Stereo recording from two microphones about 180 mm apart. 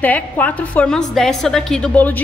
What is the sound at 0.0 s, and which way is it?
A woman's voice, 10° left (ahead or behind).